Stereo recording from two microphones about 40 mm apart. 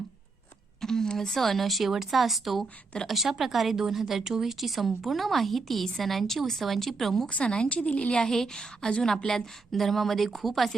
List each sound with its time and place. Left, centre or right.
0.8 s speech: centre
7.3 s a woman's voice: left
8.2 s a woman's voice: centre